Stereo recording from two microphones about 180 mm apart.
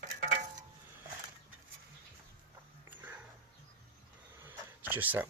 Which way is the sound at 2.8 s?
10° right (ahead or behind).